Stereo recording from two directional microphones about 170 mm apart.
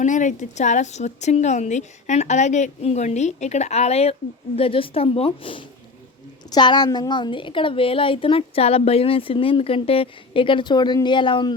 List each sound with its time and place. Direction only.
0.0 s a woman's voice: 45° left (ahead or behind); by 11.5 s 30° left (ahead or behind)